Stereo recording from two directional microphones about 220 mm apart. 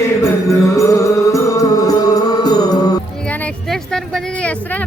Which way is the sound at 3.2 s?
5° left (ahead or behind).